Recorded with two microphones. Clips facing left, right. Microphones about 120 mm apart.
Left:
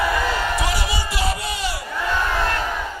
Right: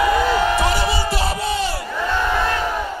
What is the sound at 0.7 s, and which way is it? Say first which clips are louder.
Music: right 5 dB; 30° right (ahead or behind).